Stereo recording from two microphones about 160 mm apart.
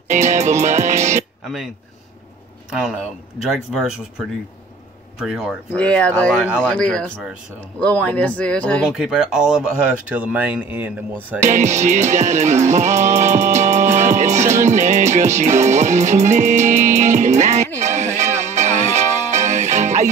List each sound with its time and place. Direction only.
0.1 s music: 45° right (ahead or behind)
1.4 s speech: centre (ahead or behind)
5.2 s speech: centre (ahead or behind)
5.8 s speech: 5° left (ahead or behind)
8.8 s speech: 5° right (ahead or behind)
11.4 s music: 45° right (ahead or behind)